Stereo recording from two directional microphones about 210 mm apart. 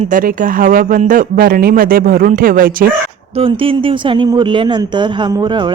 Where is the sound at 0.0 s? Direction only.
40° right (ahead or behind).